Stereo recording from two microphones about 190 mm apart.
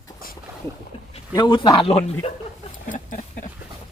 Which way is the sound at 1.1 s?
25° left (ahead or behind).